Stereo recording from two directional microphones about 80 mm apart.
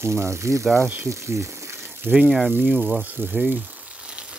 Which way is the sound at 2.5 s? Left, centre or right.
Centre.